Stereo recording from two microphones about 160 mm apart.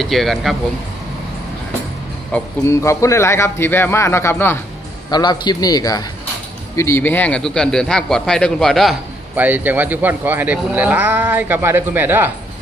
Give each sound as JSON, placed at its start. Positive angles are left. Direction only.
{"t": 0.0, "sound": "a man's voice", "side_deg": 0}
{"t": 2.6, "sound": "a man's voice", "side_deg": 20}
{"t": 5.1, "sound": "a man's voice", "side_deg": 25}
{"t": 9.3, "sound": "speech", "side_deg": -10}